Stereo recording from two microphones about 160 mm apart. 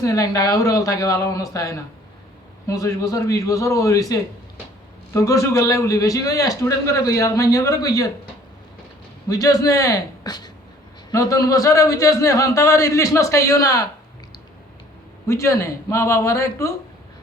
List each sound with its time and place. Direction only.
0.0 s a man's voice: 20° left (ahead or behind)
9.3 s a man's voice: 20° left (ahead or behind)
15.3 s a man's voice: 20° left (ahead or behind)